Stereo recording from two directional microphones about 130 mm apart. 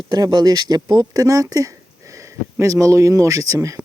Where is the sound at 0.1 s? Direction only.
30° right (ahead or behind).